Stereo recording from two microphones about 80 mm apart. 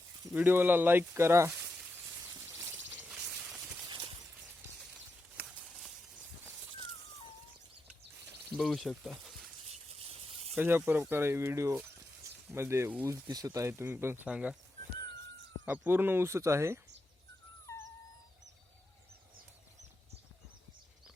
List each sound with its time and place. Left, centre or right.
0.3 s speech: right
3.1 s a sound: centre
3.8 s clip-clop: right
8.6 s speech: centre
10.6 s speech: right
13.2 s speech: right
14.3 s speech: centre
15.6 s speech: right